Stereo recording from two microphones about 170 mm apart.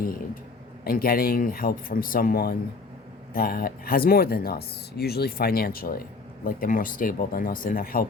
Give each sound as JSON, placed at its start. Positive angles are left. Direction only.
{"t": 0.9, "sound": "speech", "side_deg": 60}